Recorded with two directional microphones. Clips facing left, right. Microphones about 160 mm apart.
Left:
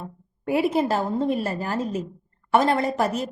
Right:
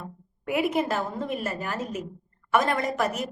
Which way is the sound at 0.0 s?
30° left (ahead or behind).